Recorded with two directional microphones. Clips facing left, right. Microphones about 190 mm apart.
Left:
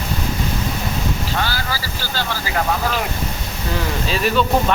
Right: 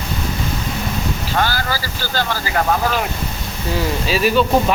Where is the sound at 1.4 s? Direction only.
50° right (ahead or behind).